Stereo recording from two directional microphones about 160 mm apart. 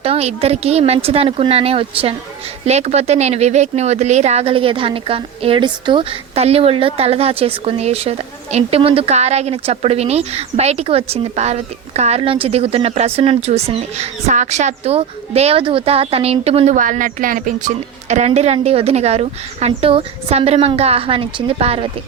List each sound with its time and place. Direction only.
0.0 s speech: 40° right (ahead or behind)
16.7 s speech: 55° right (ahead or behind); by 21.8 s 35° right (ahead or behind)